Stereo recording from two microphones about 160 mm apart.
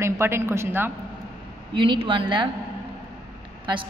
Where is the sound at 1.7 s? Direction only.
30° right (ahead or behind).